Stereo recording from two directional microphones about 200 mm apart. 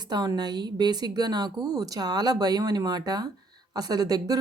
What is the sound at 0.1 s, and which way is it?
Speech, 20° right (ahead or behind).